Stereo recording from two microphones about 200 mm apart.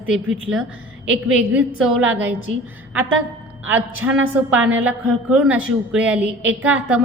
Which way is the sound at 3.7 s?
10° right (ahead or behind).